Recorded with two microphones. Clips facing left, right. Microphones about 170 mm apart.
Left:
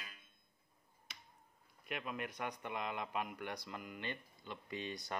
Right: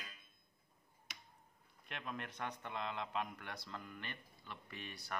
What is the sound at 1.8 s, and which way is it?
Speech, 10° left (ahead or behind).